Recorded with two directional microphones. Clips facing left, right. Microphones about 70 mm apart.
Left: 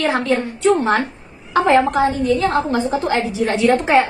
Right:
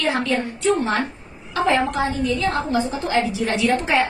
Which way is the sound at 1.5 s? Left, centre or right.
Left.